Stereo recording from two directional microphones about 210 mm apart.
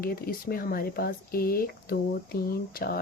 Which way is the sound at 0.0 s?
45° left (ahead or behind).